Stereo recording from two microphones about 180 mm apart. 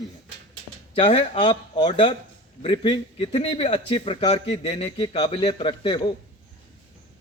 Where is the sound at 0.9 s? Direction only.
30° left (ahead or behind).